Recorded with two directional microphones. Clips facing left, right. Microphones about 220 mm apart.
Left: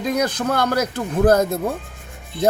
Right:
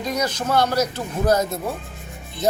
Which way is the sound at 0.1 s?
55° left (ahead or behind).